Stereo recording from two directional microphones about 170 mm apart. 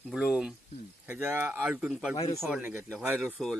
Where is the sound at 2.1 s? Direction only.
35° left (ahead or behind).